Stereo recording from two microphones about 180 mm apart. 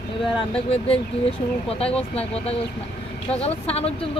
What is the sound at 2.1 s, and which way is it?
Speech, 35° left (ahead or behind).